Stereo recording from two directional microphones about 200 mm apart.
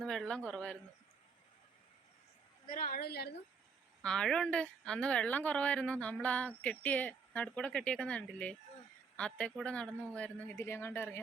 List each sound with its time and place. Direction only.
0.0 s a woman's voice: 5° left (ahead or behind)
2.6 s a woman's voice: 45° left (ahead or behind)
4.0 s a woman's voice: 5° left (ahead or behind)